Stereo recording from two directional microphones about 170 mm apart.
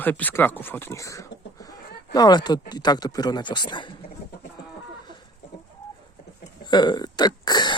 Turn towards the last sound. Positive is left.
turn(degrees=25)  # may be behind; listen again after turning